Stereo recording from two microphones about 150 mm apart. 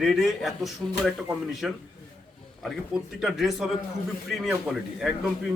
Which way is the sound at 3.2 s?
Centre (ahead or behind).